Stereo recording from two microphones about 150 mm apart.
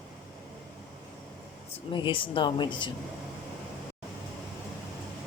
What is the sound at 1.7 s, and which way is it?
A woman's voice, 35° left (ahead or behind).